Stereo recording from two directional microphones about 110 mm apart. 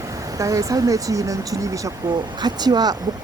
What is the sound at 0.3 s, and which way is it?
Speech, 30° right (ahead or behind).